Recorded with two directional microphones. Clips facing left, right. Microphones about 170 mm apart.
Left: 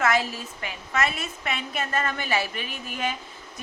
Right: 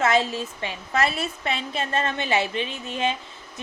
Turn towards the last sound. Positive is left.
turn(degrees=-25)  # may be behind; listen again after turning